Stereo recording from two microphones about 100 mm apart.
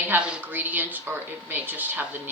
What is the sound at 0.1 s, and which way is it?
Speech, 15° right (ahead or behind).